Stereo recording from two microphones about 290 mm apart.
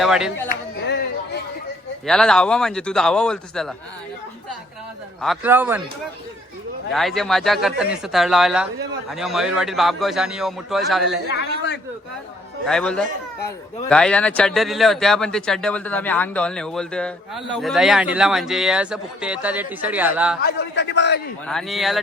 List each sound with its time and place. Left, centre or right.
0.0 s speech: centre
0.4 s a sound: left
2.0 s speech: centre
5.2 s speech: centre
6.9 s speech: centre
11.3 s a man's voice: left
12.6 s speech: centre
20.4 s a man's voice: left
21.4 s speech: centre